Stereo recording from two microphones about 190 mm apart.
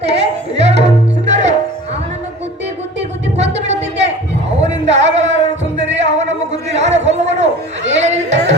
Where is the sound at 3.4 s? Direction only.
35° right (ahead or behind).